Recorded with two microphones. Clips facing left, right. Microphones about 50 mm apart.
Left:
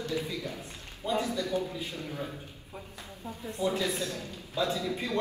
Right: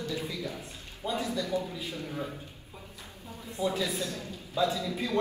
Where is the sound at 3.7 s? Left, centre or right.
Left.